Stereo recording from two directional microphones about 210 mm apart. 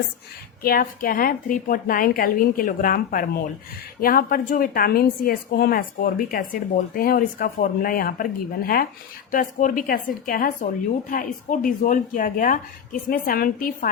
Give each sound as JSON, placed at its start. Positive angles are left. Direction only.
{"t": 0.6, "sound": "a woman's voice", "side_deg": 45}